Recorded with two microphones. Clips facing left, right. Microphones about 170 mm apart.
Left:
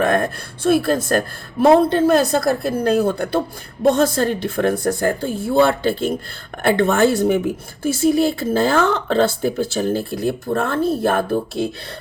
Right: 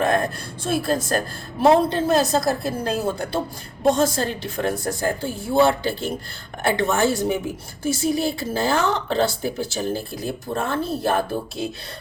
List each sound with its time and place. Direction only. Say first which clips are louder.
0.6 s speech: left 6 dB; 60° left (ahead or behind)